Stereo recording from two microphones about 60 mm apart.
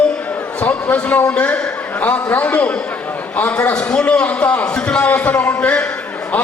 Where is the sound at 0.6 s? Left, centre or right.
Left.